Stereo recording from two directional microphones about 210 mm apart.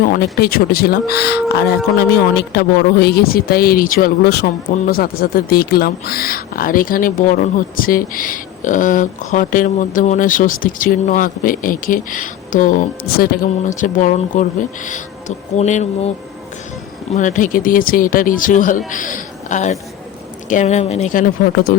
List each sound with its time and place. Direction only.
0.0 s speech: 45° left (ahead or behind)
15.5 s a man's voice: 35° left (ahead or behind)